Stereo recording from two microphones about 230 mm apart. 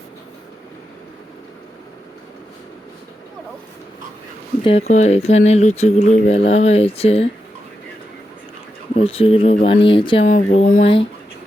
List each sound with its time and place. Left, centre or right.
4.6 s speech: left
9.0 s speech: left